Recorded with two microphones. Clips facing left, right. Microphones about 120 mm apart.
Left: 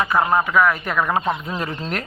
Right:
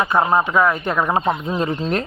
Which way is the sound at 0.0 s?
25° right (ahead or behind).